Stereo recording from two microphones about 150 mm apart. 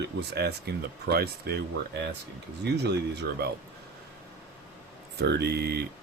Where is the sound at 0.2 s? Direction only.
90° right.